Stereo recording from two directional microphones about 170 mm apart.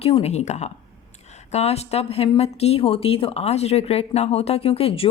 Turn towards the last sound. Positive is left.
turn(degrees=35)  # may be behind; listen again after turning